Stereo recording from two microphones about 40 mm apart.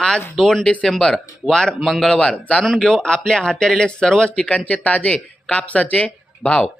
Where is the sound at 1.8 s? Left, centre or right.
Centre.